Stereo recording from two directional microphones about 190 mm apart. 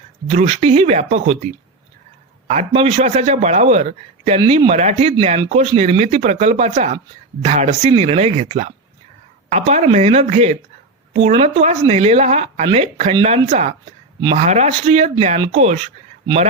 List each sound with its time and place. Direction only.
0.3 s a man's voice: 35° right (ahead or behind)
2.5 s a man's voice: 35° right (ahead or behind)
14.2 s speech: 25° right (ahead or behind)
14.4 s a man's voice: 35° right (ahead or behind)